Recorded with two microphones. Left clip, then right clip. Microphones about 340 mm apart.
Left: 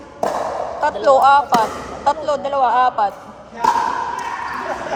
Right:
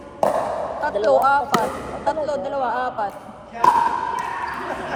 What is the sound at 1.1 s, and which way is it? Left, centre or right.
Speech, left.